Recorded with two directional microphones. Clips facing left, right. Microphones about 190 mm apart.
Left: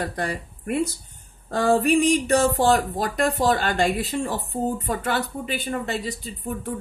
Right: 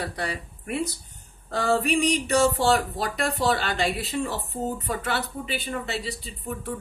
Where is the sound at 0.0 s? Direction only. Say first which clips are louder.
Left 3 dB; 50° left (ahead or behind).